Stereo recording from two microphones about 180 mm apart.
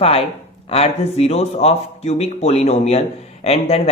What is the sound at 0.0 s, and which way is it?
Speech, 35° left (ahead or behind).